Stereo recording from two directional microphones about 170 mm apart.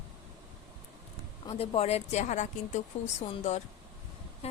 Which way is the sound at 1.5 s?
35° left (ahead or behind).